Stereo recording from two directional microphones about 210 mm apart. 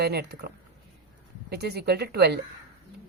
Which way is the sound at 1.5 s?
50° right (ahead or behind).